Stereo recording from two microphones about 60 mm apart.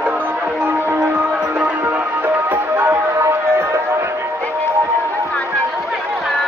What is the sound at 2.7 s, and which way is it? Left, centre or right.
Music, right.